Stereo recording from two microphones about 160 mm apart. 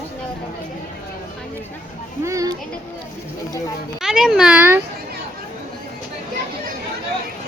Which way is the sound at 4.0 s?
5° right (ahead or behind).